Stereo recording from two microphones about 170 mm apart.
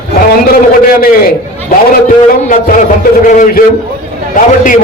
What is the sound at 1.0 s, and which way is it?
A man's voice, 55° left (ahead or behind).